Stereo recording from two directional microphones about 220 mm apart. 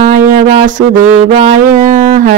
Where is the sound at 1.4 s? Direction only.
35° right (ahead or behind).